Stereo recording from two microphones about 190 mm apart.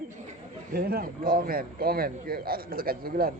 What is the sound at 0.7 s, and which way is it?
Speech, 50° right (ahead or behind).